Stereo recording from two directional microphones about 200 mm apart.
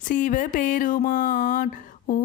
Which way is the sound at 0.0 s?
40° left (ahead or behind).